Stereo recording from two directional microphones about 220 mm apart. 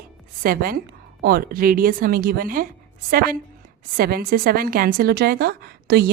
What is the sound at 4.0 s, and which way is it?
A woman's voice, 40° right (ahead or behind).